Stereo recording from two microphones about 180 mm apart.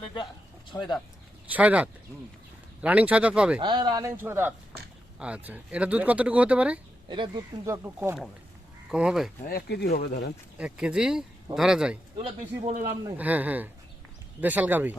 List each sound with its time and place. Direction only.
0.7 s speech: 20° left (ahead or behind)
1.5 s speech: 10° right (ahead or behind)
3.6 s speech: 25° right (ahead or behind); by 6.7 s 5° right (ahead or behind)
7.1 s speech: 25° right (ahead or behind); by 9.3 s 5° right (ahead or behind)
9.5 s speech: 60° left (ahead or behind)
10.6 s speech: 5° right (ahead or behind)
12.1 s speech: 30° right (ahead or behind)
13.1 s speech: 10° right (ahead or behind)